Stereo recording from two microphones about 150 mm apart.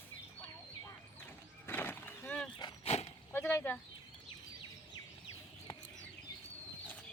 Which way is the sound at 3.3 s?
15° left (ahead or behind).